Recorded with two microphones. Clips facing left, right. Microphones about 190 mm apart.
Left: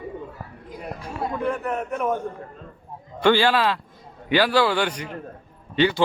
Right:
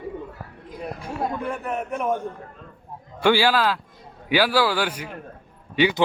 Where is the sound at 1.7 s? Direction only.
25° right (ahead or behind).